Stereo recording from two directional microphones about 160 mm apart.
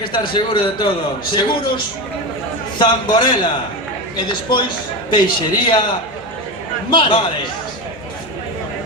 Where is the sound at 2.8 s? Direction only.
30° left (ahead or behind).